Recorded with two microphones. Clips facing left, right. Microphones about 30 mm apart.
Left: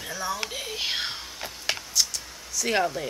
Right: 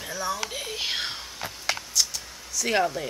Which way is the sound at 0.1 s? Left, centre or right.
Centre.